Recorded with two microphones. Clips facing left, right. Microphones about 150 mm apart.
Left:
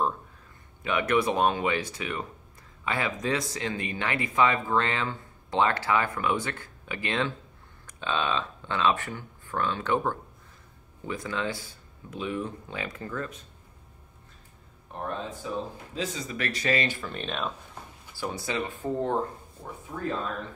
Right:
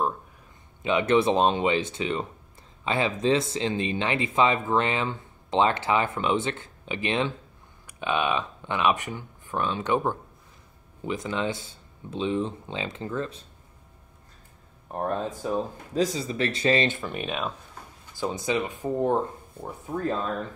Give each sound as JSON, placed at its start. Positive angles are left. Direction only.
{"t": 0.8, "sound": "speech", "side_deg": -25}
{"t": 14.9, "sound": "speech", "side_deg": -45}